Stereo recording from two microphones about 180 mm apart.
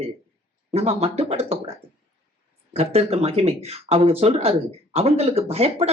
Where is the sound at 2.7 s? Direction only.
35° right (ahead or behind).